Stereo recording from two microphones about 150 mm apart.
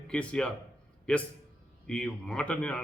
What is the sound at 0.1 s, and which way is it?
A man's voice, 10° left (ahead or behind).